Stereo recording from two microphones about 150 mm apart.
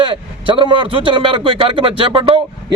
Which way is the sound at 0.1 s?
35° right (ahead or behind).